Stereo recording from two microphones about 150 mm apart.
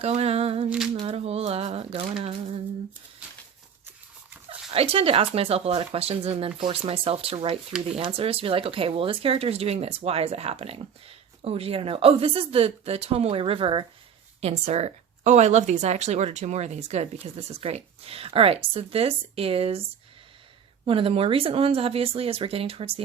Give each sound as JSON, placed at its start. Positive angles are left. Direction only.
{"t": 0.0, "sound": "speech", "side_deg": -45}
{"t": 4.7, "sound": "speech", "side_deg": -40}
{"t": 14.4, "sound": "speech", "side_deg": -45}
{"t": 20.8, "sound": "speech", "side_deg": -40}